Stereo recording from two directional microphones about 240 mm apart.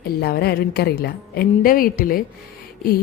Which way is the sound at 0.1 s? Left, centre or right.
Left.